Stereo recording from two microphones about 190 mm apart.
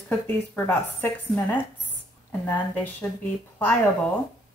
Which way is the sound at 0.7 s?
10° left (ahead or behind).